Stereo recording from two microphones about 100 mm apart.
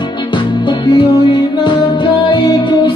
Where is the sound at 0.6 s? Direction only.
50° left (ahead or behind).